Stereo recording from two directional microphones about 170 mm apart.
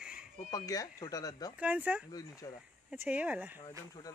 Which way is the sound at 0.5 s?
20° left (ahead or behind).